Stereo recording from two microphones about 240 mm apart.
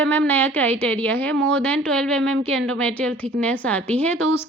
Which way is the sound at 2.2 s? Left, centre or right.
Right.